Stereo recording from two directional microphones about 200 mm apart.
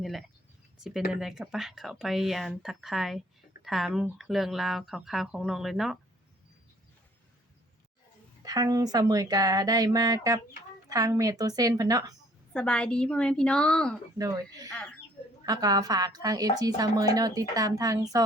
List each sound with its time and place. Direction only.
0.0 s speech: centre (ahead or behind)
8.4 s a woman's voice: 20° right (ahead or behind)
12.5 s speech: 5° left (ahead or behind)
14.2 s speech: 15° right (ahead or behind)
14.7 s speech: 5° left (ahead or behind)
15.4 s a woman's voice: 20° right (ahead or behind)